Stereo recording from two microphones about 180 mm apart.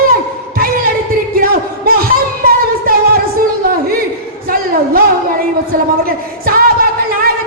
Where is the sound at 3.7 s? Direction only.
55° right (ahead or behind).